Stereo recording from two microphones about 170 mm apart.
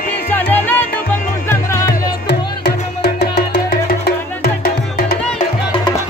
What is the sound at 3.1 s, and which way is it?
Music, 75° left (ahead or behind).